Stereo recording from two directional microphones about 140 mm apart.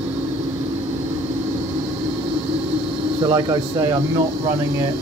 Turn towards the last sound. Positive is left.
turn(degrees=-30)  # may be behind; listen again after turning